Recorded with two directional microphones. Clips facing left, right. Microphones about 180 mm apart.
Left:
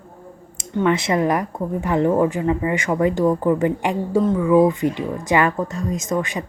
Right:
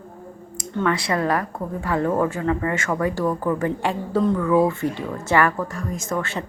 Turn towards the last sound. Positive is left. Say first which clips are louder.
# left 3 dB
turn(degrees=15)  # may be behind; listen again after turning